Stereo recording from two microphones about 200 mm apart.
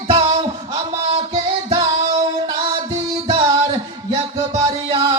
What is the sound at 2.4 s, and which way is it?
Music, 25° right (ahead or behind).